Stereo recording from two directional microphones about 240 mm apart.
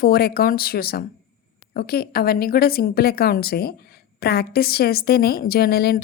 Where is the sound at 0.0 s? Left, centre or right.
Left.